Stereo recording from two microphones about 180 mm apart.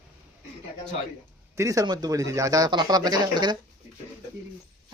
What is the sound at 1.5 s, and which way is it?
Speech, 20° right (ahead or behind).